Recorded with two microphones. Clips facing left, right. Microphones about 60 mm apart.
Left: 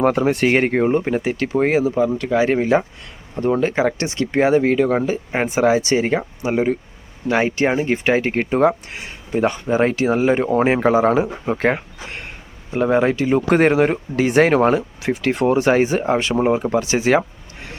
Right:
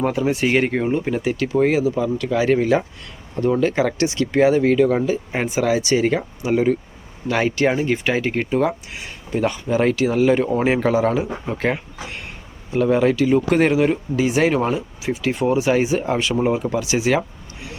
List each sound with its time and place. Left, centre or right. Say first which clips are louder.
0.0 s speech: left 3 dB; left
0.5 s speech: left 3 dB; left
1.0 s speech: left 1 dB; left
8.4 s speech: left 4 dB; left